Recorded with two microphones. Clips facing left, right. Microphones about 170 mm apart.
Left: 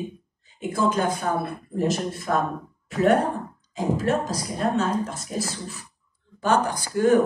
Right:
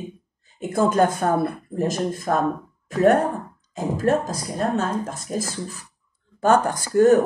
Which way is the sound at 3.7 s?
40° right (ahead or behind).